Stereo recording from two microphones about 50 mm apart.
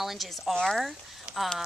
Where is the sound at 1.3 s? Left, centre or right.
Centre.